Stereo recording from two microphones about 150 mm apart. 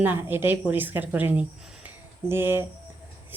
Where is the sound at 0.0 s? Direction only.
15° right (ahead or behind).